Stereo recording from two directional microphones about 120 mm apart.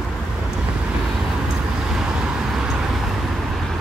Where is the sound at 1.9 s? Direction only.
5° right (ahead or behind).